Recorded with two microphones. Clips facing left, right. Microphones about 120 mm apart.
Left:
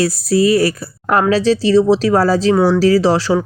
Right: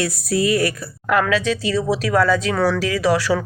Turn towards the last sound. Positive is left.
turn(degrees=30)  # may be behind; listen again after turning